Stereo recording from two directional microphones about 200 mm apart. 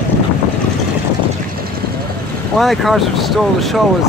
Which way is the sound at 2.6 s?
Centre (ahead or behind).